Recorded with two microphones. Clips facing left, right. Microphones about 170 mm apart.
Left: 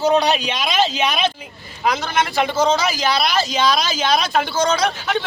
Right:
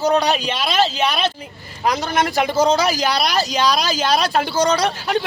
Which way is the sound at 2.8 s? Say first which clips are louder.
Right 1 dB; 40° right (ahead or behind).